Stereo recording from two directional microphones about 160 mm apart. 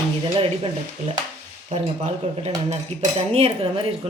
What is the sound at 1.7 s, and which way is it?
Speech, 40° right (ahead or behind).